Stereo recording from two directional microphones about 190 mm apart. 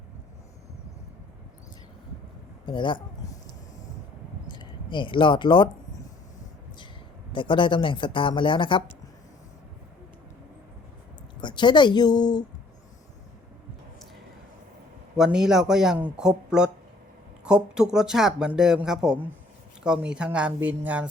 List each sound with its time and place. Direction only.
2.6 s speech: 25° left (ahead or behind)
4.5 s speech: 25° left (ahead or behind)
7.3 s speech: 25° left (ahead or behind)
11.3 s speech: 25° left (ahead or behind)
15.1 s speech: 5° right (ahead or behind)